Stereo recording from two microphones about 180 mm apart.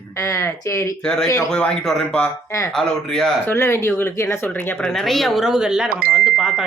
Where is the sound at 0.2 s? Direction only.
15° left (ahead or behind).